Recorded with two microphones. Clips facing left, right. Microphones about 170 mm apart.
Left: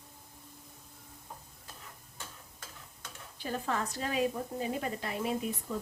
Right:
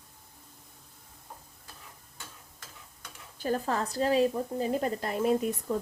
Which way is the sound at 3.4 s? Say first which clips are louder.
Right 5 dB; 40° right (ahead or behind).